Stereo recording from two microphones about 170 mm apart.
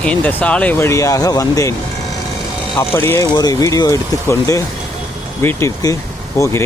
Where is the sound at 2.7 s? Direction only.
15° left (ahead or behind).